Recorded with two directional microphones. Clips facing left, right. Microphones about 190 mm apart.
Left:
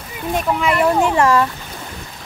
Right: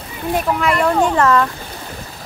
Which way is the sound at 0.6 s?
5° left (ahead or behind).